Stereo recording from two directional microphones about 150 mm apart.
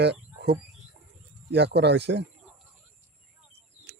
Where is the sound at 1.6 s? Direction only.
90° right.